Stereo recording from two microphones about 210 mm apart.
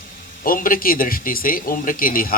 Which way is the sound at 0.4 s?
40° left (ahead or behind).